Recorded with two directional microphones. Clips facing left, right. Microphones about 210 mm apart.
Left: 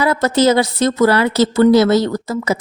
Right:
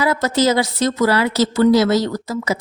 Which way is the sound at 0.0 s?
55° left (ahead or behind).